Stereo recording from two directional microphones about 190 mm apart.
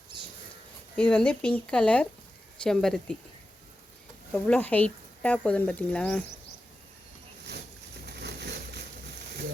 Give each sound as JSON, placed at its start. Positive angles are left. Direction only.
{"t": 0.9, "sound": "speech", "side_deg": 5}
{"t": 4.3, "sound": "speech", "side_deg": 5}
{"t": 8.0, "sound": "a sound", "side_deg": -60}